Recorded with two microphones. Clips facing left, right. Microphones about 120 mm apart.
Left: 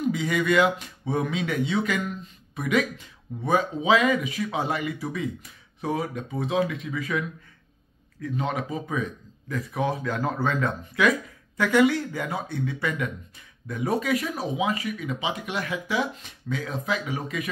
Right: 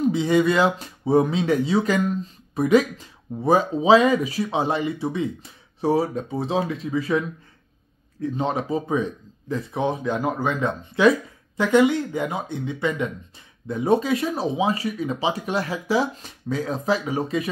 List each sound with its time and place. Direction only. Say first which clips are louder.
0.0 s speech: right 6 dB; 30° right (ahead or behind)